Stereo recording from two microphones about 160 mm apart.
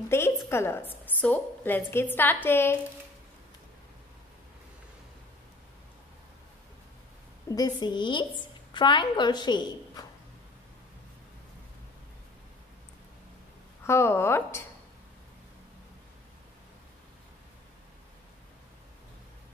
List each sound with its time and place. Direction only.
0.1 s a sound: 15° left (ahead or behind)
1.0 s a woman's voice: 10° left (ahead or behind)
7.4 s a woman's voice: 25° left (ahead or behind)
13.8 s a woman's voice: 15° left (ahead or behind)